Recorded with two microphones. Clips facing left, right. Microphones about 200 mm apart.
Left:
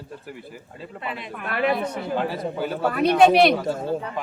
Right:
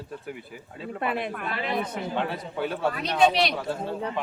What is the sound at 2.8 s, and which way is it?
Speech, 60° left (ahead or behind).